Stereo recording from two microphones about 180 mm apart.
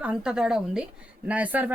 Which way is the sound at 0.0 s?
5° right (ahead or behind).